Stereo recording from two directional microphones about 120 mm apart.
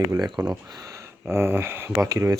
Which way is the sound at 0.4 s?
30° right (ahead or behind).